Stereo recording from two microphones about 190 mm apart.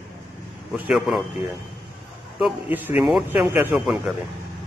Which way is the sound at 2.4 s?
5° right (ahead or behind).